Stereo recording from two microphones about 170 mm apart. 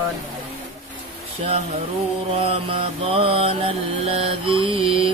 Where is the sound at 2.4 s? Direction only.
30° right (ahead or behind).